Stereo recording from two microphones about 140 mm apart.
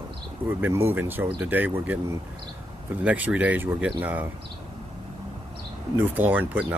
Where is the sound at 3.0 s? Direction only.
10° right (ahead or behind).